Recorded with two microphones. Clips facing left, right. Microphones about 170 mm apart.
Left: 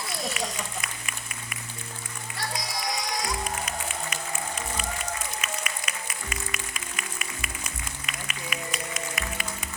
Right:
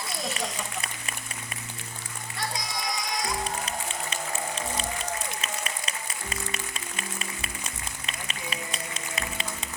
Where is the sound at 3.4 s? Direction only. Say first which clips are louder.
Even; 30° right (ahead or behind).